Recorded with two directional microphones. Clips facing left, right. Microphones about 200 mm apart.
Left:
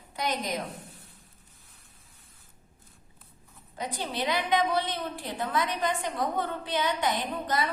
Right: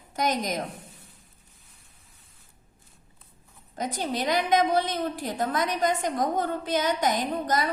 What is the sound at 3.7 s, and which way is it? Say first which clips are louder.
A woman's voice: right 4 dB; 45° right (ahead or behind).